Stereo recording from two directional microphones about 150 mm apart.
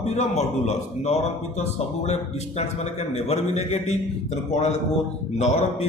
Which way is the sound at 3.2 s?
45° left (ahead or behind).